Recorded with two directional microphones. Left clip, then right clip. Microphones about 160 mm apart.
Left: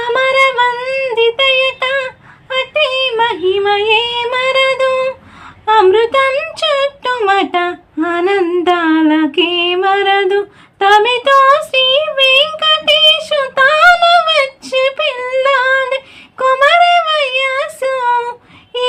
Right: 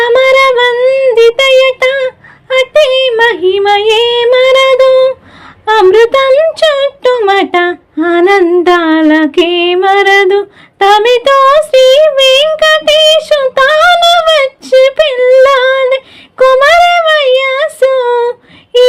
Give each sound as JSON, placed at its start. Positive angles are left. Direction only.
{"t": 0.0, "sound": "singing", "side_deg": -40}
{"t": 0.9, "sound": "a sound", "side_deg": -30}
{"t": 1.1, "sound": "child singing", "side_deg": -40}
{"t": 2.5, "sound": "female singing", "side_deg": -40}
{"t": 5.6, "sound": "a sound", "side_deg": -40}
{"t": 6.3, "sound": "female singing", "side_deg": -35}